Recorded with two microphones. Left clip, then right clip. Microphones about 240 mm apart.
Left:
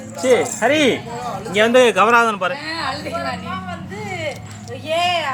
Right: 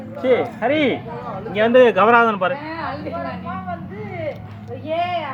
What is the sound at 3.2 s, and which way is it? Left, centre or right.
Speech, left.